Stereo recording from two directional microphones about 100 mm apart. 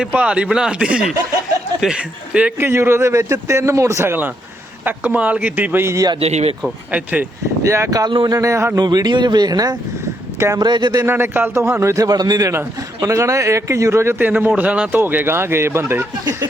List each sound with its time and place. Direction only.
0.0 s speech: 10° right (ahead or behind)
2.6 s a man's voice: 25° right (ahead or behind)
6.1 s speech: 90° right
6.6 s speech: 10° right (ahead or behind)
7.6 s speech: 30° right (ahead or behind)
8.8 s speech: 45° right (ahead or behind)
11.0 s a man's voice: 20° right (ahead or behind)